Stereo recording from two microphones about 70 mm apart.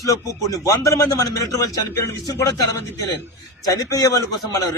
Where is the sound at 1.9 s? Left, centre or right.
Left.